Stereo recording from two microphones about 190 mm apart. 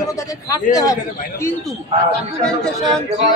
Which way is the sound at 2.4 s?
5° left (ahead or behind).